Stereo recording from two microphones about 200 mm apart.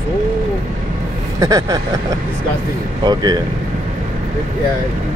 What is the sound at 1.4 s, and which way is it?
Speech, 15° right (ahead or behind).